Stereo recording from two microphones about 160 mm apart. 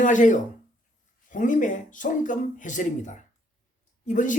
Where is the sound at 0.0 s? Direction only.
50° left (ahead or behind).